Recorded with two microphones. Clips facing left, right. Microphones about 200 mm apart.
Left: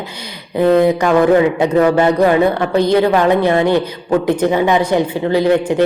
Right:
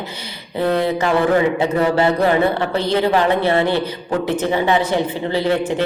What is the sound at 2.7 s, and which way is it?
A woman's voice, 15° left (ahead or behind).